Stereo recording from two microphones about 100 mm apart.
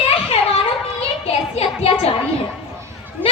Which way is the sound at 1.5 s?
90° left.